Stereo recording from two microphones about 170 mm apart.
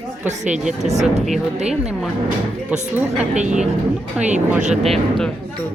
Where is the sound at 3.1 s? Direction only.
45° right (ahead or behind).